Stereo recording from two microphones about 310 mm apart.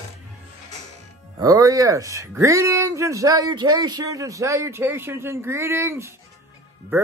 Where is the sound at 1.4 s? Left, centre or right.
Centre.